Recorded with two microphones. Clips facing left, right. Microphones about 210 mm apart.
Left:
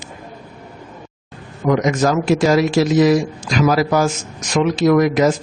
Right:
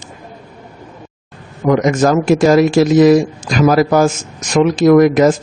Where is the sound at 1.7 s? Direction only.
50° right (ahead or behind).